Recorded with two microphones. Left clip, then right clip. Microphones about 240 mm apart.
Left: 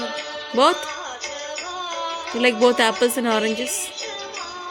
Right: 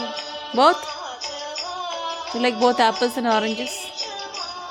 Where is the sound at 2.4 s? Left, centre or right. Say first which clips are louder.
Left 1 dB; centre.